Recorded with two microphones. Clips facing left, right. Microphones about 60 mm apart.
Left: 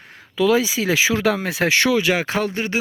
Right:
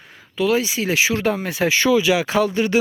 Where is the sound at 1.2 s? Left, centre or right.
Left.